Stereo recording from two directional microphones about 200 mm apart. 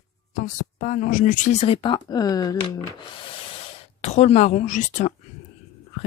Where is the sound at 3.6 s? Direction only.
35° left (ahead or behind).